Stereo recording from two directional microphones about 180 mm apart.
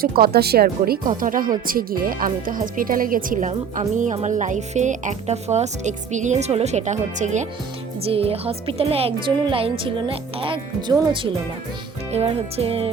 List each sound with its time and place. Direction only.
0.0 s speech: 60° right (ahead or behind); by 10.9 s 25° right (ahead or behind)
12.1 s speech: 35° right (ahead or behind)